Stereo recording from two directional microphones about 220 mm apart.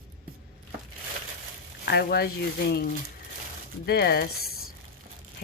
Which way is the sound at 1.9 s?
45° left (ahead or behind).